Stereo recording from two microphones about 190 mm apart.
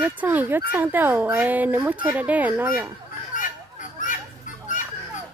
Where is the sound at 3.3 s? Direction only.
45° left (ahead or behind).